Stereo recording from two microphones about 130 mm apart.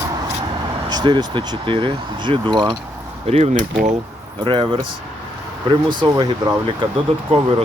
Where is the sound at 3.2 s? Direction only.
50° right (ahead or behind).